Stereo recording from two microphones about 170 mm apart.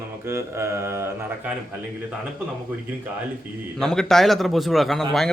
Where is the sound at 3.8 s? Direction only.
Centre (ahead or behind).